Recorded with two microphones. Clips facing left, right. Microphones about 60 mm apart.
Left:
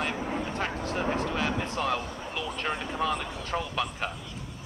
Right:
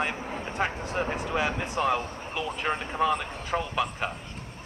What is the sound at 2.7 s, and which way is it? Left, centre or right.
Speech, right.